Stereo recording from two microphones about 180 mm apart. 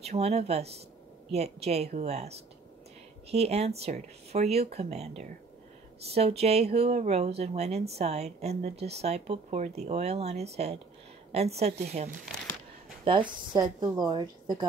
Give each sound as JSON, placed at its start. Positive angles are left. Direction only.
{"t": 0.0, "sound": "a woman's voice", "side_deg": -35}